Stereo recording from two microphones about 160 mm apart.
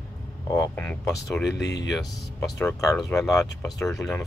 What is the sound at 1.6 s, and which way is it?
Speech, 90° left.